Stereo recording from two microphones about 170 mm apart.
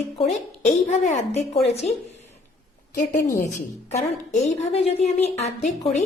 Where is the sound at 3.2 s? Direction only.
20° left (ahead or behind).